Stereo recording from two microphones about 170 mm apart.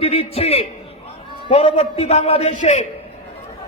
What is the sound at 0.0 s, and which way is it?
A man's voice, 35° left (ahead or behind).